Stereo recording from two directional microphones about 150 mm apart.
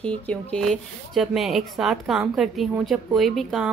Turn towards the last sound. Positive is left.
turn(degrees=0)  # may be behind; listen again after turning